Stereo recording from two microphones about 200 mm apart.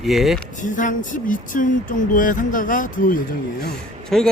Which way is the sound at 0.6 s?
40° left (ahead or behind).